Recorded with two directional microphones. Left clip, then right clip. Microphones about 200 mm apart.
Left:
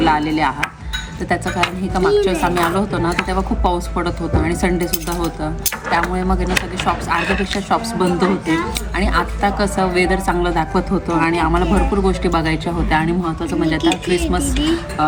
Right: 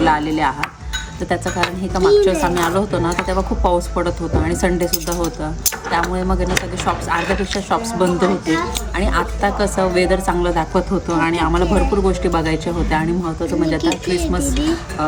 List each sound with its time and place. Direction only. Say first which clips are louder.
0.0 s a woman's voice: even; 5° right (ahead or behind)
7.2 s speech: left 1 dB; 30° right (ahead or behind)
7.5 s a woman's voice: left 1 dB; centre (ahead or behind)
8.2 s speech: even; 35° right (ahead or behind)
9.0 s a woman's voice: left 1 dB; centre (ahead or behind)
14.2 s speech: left 1 dB; 30° right (ahead or behind)